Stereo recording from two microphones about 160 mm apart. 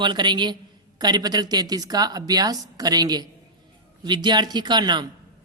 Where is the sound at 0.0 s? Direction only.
30° right (ahead or behind).